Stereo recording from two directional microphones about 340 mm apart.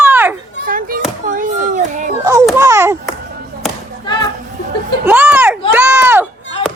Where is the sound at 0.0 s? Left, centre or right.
Centre.